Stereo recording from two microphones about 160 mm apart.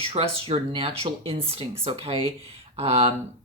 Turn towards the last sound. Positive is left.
turn(degrees=-40)  # may be behind; listen again after turning